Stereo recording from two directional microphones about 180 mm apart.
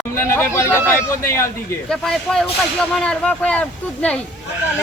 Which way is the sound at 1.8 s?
Centre (ahead or behind).